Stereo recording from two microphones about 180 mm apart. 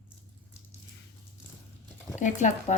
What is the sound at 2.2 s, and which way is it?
Speech, 45° left (ahead or behind).